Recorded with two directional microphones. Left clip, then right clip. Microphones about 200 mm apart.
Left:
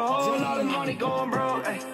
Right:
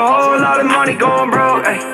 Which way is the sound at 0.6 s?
15° right (ahead or behind).